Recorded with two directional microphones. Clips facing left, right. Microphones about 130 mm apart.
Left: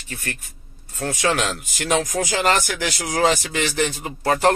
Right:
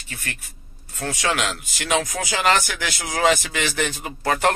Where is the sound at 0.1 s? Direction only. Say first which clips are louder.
Left 3 dB; 35° left (ahead or behind).